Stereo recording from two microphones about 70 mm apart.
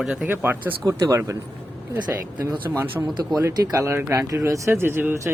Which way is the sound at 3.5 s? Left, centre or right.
Right.